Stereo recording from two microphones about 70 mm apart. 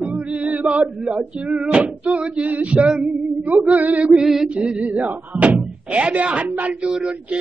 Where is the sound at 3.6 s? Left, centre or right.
Right.